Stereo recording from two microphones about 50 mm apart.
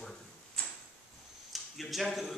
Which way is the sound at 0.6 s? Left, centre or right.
Left.